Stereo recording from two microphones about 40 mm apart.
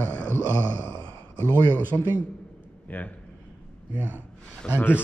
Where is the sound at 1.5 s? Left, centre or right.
Right.